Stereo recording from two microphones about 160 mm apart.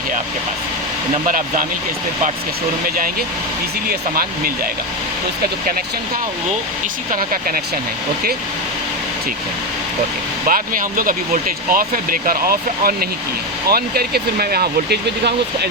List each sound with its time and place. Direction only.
3.8 s speech: 70° right (ahead or behind)
7.1 s speech: 60° right (ahead or behind)
10.4 s speech: 60° right (ahead or behind); by 15.7 s 90° right